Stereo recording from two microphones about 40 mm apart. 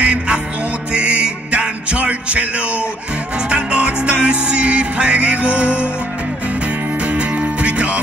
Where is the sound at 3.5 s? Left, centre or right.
Right.